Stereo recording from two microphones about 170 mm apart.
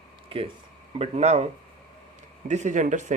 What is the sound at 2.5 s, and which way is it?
Speech, 45° right (ahead or behind).